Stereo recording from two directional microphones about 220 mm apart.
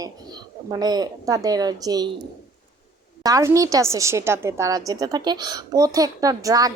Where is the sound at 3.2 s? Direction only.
15° right (ahead or behind).